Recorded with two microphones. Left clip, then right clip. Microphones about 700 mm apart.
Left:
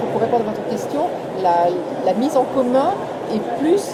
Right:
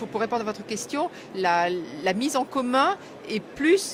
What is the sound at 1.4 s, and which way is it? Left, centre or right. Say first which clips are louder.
Speech: left 6 dB; right.